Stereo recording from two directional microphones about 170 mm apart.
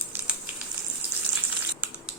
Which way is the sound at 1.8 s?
5° right (ahead or behind).